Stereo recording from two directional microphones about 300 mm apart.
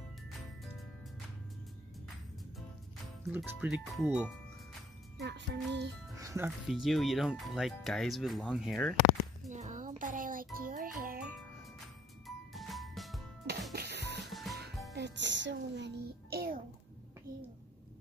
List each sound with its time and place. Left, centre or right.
3.3 s speech: centre
5.2 s music: right
6.1 s speech: centre
9.5 s music: right
12.3 s music: centre
13.7 s music: right
14.2 s music: centre
15.0 s music: right